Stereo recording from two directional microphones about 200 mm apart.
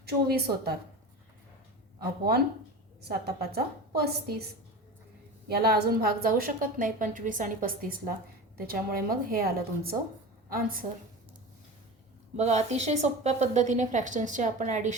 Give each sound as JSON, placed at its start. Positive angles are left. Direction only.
{"t": 0.0, "sound": "a woman's voice", "side_deg": -55}
{"t": 3.0, "sound": "a woman's voice", "side_deg": -50}
{"t": 5.5, "sound": "a woman's voice", "side_deg": -50}
{"t": 12.4, "sound": "a woman's voice", "side_deg": -35}